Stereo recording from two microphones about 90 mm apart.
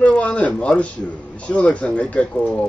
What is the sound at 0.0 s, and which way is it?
A man's voice, 15° left (ahead or behind).